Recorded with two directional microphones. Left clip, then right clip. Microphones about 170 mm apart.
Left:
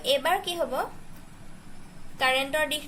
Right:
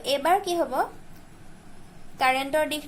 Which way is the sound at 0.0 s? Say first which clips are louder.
Right 2 dB; 25° right (ahead or behind).